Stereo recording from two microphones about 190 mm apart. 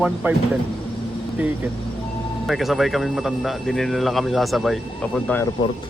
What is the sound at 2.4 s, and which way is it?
Speech, centre (ahead or behind).